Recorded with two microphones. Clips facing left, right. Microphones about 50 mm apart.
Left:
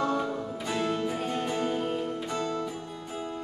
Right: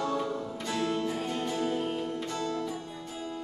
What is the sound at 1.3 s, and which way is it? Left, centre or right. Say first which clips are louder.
Music: left 2 dB; left.